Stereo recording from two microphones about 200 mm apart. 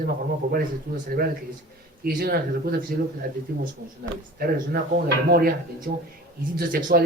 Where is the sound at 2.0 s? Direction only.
50° right (ahead or behind).